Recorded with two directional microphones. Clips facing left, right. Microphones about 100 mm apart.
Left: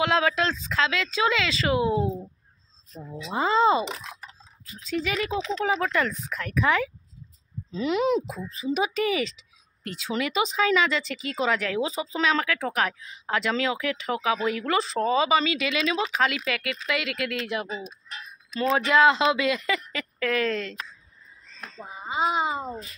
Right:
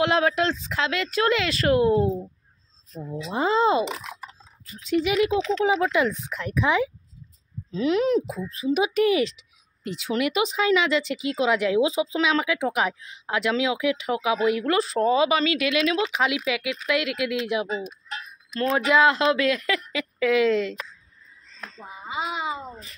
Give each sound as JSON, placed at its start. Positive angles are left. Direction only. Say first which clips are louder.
{"t": 0.0, "sound": "speech", "louder": "right 2 dB", "side_deg": -10}
{"t": 1.7, "sound": "speech", "louder": "right 5 dB", "side_deg": 5}
{"t": 3.3, "sound": "speech", "louder": "even", "side_deg": -10}
{"t": 5.3, "sound": "speech", "louder": "right 5 dB", "side_deg": 0}
{"t": 5.7, "sound": "speech", "louder": "right 1 dB", "side_deg": -10}
{"t": 7.7, "sound": "speech", "louder": "right 2 dB", "side_deg": 0}
{"t": 22.1, "sound": "a child's voice", "louder": "left 4 dB", "side_deg": 35}